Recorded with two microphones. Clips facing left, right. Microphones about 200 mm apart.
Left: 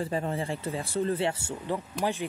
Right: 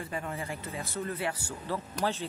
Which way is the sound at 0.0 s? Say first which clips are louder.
Left 6 dB; 30° left (ahead or behind).